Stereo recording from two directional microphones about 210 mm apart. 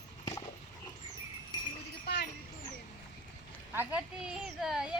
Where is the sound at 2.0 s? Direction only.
50° left (ahead or behind).